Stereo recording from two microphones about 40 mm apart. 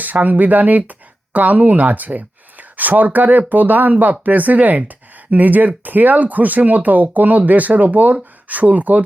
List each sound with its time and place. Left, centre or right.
0.0 s speech: right